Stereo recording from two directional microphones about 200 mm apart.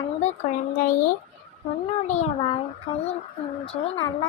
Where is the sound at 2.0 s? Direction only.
35° left (ahead or behind).